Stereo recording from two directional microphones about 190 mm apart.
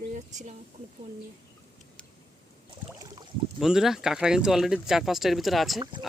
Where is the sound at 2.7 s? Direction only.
20° right (ahead or behind).